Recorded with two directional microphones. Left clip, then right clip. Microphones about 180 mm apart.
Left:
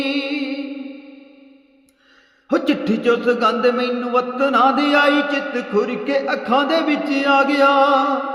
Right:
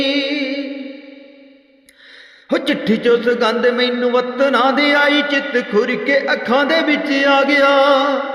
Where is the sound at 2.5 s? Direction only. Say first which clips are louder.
Right 2 dB; 25° right (ahead or behind).